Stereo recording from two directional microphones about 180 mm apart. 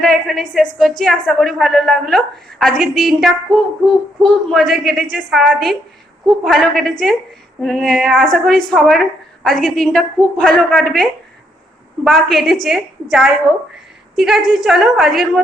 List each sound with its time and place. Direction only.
0.0 s a woman's voice: centre (ahead or behind)